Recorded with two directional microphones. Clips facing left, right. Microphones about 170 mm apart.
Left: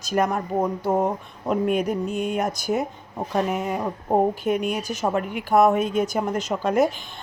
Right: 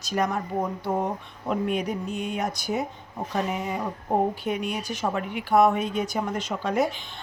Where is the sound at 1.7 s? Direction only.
50° left (ahead or behind).